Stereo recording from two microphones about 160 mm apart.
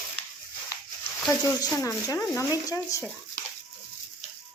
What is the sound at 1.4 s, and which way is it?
Speech, 20° left (ahead or behind).